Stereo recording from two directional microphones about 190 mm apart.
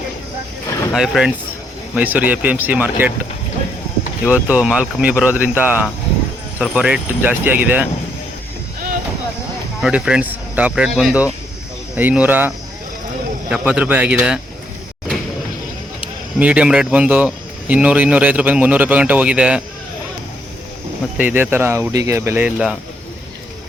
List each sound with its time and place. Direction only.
0.9 s speech: centre (ahead or behind)
4.3 s speech: 5° right (ahead or behind)
9.8 s speech: 5° right (ahead or behind)
16.4 s speech: 5° right (ahead or behind)
21.2 s speech: 10° right (ahead or behind)